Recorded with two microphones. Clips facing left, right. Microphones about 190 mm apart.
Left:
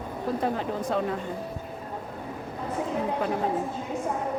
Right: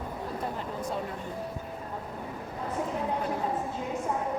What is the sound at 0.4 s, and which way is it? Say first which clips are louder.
Speech: left 6 dB; 90° left.